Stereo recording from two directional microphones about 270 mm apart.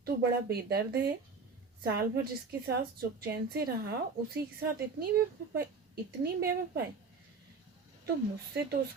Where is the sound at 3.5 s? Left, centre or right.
Right.